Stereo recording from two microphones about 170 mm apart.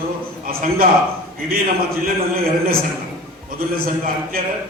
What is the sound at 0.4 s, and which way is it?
Speech, 55° right (ahead or behind).